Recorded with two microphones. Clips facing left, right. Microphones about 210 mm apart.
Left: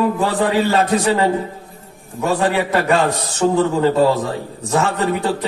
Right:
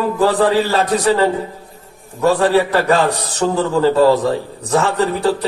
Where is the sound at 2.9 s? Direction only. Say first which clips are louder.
Right 1 dB; 35° right (ahead or behind).